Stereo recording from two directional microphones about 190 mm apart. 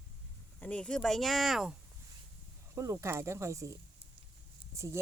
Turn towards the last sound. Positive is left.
turn(degrees=-15)  # may be behind; listen again after turning